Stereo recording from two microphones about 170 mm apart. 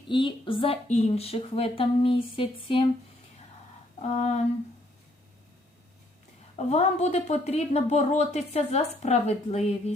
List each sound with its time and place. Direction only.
0.1 s speech: 30° left (ahead or behind)
4.0 s speech: 40° left (ahead or behind)
6.6 s speech: 40° left (ahead or behind)